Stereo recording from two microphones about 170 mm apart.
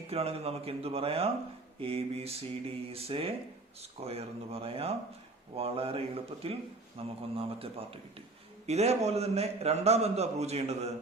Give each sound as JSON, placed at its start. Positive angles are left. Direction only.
{"t": 0.1, "sound": "a man's voice", "side_deg": -35}